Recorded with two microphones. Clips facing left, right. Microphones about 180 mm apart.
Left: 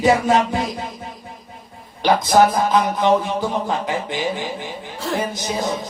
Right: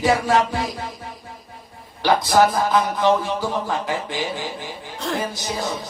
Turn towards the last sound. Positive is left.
turn(degrees=20)  # may be behind; listen again after turning